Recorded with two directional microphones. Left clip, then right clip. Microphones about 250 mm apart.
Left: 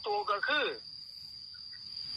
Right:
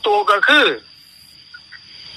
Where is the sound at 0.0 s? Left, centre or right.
Right.